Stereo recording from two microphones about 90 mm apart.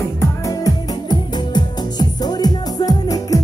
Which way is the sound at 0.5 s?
50° left (ahead or behind).